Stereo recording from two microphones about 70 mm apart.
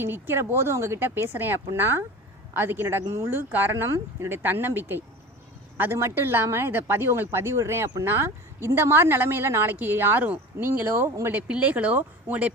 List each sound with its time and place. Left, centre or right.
0.0 s a woman's voice: right
11.3 s speech: centre